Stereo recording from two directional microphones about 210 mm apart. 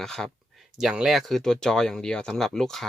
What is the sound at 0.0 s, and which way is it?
Speech, centre (ahead or behind).